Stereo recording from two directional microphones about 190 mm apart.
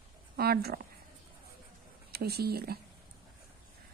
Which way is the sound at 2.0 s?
55° right (ahead or behind).